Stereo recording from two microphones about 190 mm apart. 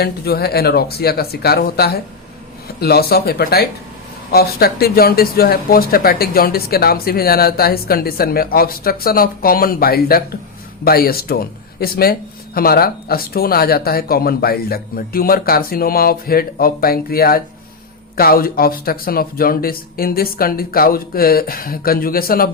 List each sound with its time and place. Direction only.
0.0 s speech: 55° left (ahead or behind)